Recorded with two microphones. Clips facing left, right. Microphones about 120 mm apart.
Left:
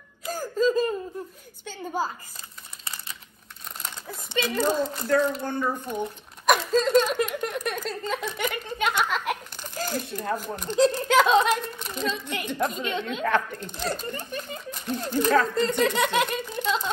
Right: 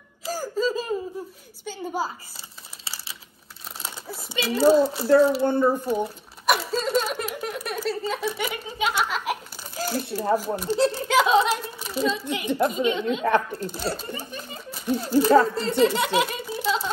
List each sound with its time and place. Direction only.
0.3 s music: 5° right (ahead or behind)
1.6 s speech: 10° right (ahead or behind)
3.8 s speech: 5° right (ahead or behind)
5.4 s speech: 30° right (ahead or behind)
5.9 s a woman's voice: 5° right (ahead or behind)